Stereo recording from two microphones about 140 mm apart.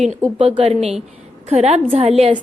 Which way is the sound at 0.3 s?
45° right (ahead or behind).